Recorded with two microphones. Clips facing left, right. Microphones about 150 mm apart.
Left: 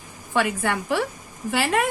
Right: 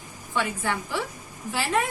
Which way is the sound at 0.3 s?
65° left (ahead or behind).